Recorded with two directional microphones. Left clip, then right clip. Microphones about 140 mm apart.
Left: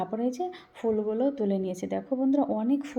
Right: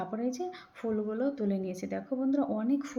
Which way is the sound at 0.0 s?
20° left (ahead or behind).